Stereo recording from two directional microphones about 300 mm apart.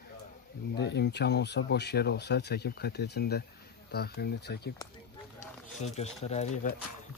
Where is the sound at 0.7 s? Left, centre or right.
Left.